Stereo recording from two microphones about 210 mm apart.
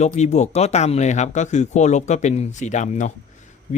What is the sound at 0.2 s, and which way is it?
Speech, 35° left (ahead or behind).